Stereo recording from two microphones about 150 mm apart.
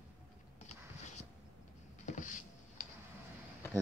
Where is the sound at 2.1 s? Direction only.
60° left (ahead or behind).